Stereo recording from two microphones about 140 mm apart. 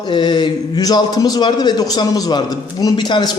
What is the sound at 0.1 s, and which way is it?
A man's voice, 35° left (ahead or behind).